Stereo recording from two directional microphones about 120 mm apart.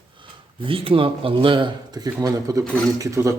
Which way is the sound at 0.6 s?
50° right (ahead or behind).